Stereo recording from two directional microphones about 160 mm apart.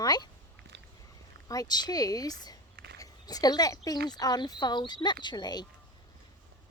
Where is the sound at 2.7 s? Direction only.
85° right.